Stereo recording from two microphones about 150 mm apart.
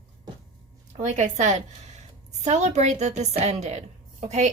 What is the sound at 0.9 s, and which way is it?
A woman's voice, 55° right (ahead or behind).